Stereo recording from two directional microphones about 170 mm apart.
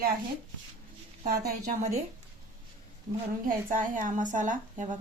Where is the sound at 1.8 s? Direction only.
40° right (ahead or behind).